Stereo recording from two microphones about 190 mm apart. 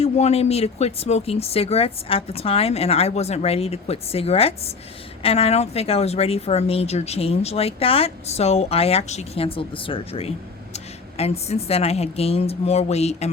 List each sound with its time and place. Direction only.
0.0 s speech: 35° left (ahead or behind)